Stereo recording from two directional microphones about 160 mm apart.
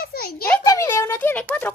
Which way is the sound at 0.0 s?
70° left (ahead or behind).